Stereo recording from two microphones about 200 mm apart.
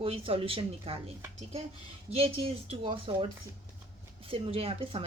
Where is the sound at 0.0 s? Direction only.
30° right (ahead or behind).